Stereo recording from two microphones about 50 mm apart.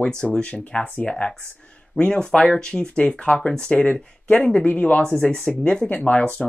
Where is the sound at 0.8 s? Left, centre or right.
Left.